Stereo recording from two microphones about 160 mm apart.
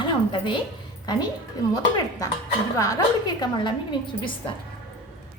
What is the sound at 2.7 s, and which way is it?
A woman's voice, 20° left (ahead or behind).